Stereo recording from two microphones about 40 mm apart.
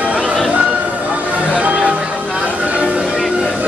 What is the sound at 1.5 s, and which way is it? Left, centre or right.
Music, right.